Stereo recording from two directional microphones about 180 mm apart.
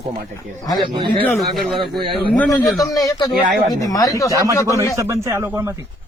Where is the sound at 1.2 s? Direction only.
5° left (ahead or behind).